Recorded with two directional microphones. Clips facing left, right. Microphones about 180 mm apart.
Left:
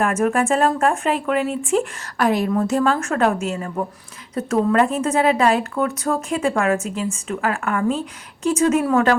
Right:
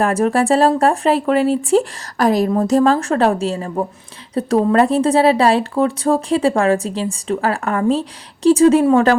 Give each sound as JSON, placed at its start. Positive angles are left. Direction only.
{"t": 0.0, "sound": "speech", "side_deg": -35}